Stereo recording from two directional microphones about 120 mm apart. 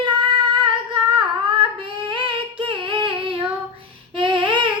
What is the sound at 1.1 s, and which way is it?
Singing, 45° right (ahead or behind).